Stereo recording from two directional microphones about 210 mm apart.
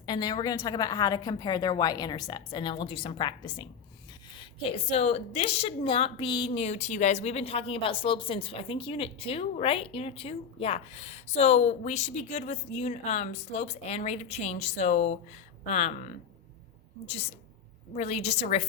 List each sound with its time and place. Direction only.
0.0 s a woman's voice: 20° left (ahead or behind)
17.9 s a woman's voice: 30° left (ahead or behind)